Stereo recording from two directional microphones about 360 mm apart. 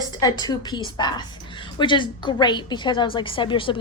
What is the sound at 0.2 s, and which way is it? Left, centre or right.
A woman's voice, centre.